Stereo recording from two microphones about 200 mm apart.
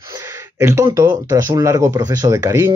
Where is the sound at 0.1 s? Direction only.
15° right (ahead or behind).